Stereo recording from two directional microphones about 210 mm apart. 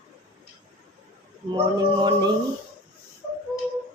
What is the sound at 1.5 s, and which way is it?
Speech, 20° right (ahead or behind).